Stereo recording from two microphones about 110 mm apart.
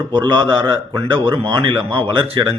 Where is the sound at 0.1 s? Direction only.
45° right (ahead or behind).